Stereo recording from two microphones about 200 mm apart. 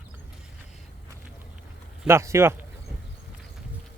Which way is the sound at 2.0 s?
15° right (ahead or behind).